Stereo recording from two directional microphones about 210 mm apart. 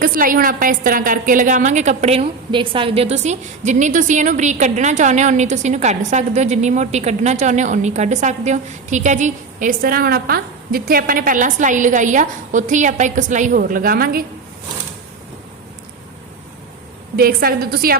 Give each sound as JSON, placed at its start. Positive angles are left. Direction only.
{"t": 0.0, "sound": "a woman's voice", "side_deg": -40}
{"t": 17.2, "sound": "a woman's voice", "side_deg": -45}